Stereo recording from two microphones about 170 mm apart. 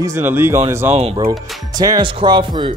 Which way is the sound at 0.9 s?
35° right (ahead or behind).